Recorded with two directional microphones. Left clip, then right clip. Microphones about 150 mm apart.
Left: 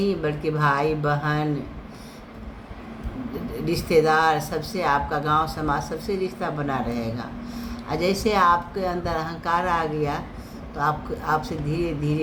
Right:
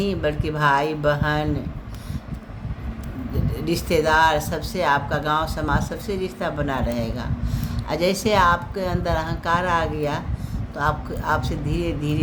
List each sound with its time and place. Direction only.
0.0 s speech: 35° right (ahead or behind)
3.7 s speech: 35° right (ahead or behind)